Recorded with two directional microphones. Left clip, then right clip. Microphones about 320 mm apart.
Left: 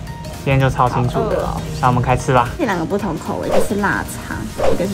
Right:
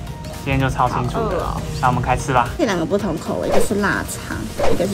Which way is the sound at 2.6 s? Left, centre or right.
Centre.